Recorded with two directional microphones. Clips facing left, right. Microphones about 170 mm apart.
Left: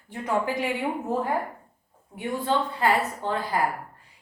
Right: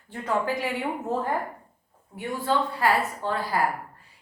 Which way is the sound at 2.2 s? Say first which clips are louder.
Even; 20° left (ahead or behind).